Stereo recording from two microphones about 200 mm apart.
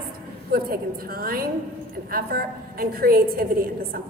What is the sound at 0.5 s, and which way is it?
A woman's voice, 50° right (ahead or behind).